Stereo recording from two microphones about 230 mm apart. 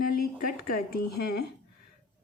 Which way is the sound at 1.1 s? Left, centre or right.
Left.